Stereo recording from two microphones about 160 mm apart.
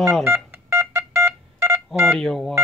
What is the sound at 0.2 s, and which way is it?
Telephone dialing, 15° right (ahead or behind).